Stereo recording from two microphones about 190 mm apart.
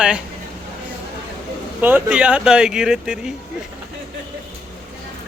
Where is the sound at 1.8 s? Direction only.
10° right (ahead or behind).